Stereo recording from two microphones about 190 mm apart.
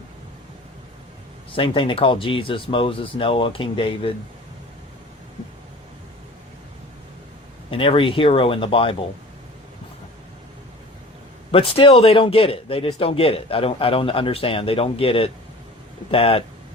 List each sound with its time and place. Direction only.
1.5 s speech: 30° left (ahead or behind)
7.7 s speech: 30° left (ahead or behind)
11.5 s speech: 30° left (ahead or behind)